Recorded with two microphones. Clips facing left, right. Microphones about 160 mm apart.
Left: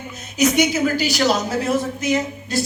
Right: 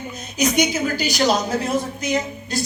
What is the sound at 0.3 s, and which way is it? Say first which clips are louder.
A man's voice: left 2 dB; 15° right (ahead or behind).